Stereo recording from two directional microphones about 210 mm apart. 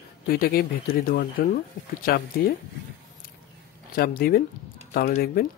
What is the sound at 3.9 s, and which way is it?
Speech, 45° left (ahead or behind).